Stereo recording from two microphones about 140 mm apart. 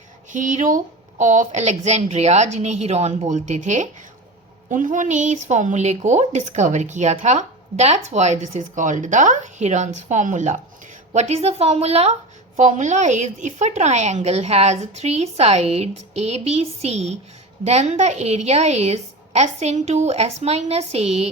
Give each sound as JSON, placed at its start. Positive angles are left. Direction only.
{"t": 0.3, "sound": "a woman's voice", "side_deg": -65}
{"t": 12.5, "sound": "speech", "side_deg": -60}